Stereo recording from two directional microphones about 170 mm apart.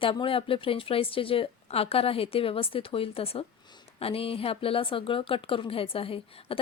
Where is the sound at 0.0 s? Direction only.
30° left (ahead or behind).